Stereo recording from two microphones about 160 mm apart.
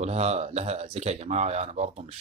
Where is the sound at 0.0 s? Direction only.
40° right (ahead or behind).